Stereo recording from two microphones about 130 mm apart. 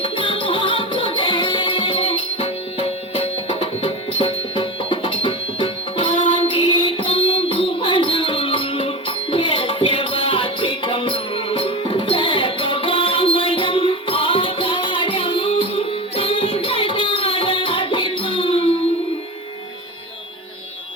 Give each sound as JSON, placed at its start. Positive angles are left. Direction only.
{"t": 0.0, "sound": "music", "side_deg": 40}